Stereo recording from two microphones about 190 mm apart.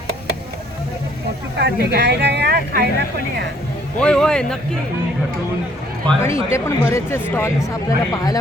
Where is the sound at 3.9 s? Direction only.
5° left (ahead or behind).